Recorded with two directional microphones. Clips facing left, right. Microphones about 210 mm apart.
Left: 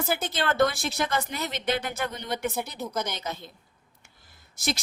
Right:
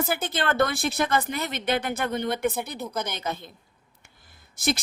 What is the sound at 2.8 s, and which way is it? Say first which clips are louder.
Speech: left 1 dB; centre (ahead or behind).